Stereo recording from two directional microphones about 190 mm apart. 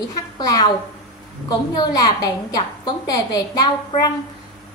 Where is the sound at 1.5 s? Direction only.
20° left (ahead or behind).